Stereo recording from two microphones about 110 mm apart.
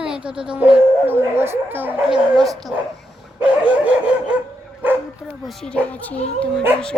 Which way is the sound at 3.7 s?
10° right (ahead or behind).